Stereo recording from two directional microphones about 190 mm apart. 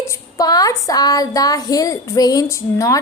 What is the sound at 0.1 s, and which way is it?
A woman's voice, 20° left (ahead or behind).